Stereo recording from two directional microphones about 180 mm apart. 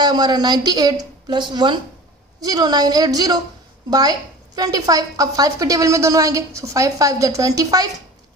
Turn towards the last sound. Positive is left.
turn(degrees=-20)  # may be behind; listen again after turning